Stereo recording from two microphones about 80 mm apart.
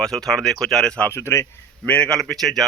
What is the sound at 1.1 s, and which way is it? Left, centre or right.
Speech, left.